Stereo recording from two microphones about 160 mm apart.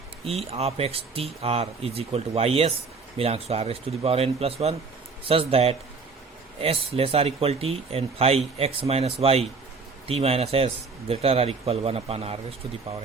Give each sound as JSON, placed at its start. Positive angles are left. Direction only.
{"t": 0.3, "sound": "speech", "side_deg": -40}